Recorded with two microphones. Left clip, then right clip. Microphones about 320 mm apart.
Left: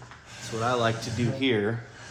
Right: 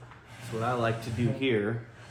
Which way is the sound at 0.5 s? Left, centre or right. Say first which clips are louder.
Left 3 dB; left.